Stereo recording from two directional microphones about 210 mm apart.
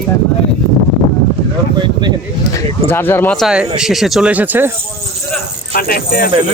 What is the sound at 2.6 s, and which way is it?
Speech, 10° left (ahead or behind).